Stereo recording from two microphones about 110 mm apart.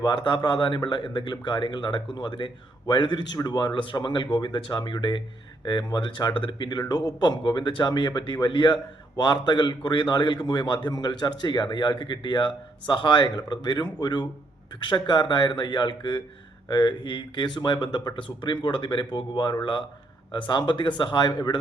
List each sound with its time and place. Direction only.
0.0 s a man's voice: 45° left (ahead or behind)